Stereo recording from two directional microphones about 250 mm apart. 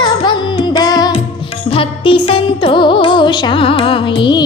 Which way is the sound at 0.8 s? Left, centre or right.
Centre.